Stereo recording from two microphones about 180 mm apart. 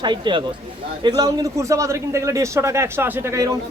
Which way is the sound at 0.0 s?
25° right (ahead or behind).